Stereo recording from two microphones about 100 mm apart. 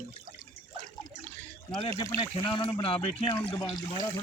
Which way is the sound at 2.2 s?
55° left (ahead or behind).